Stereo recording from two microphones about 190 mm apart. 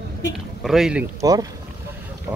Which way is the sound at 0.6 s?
5° right (ahead or behind).